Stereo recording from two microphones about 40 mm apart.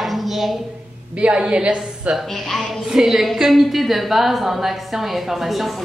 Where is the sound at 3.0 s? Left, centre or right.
Centre.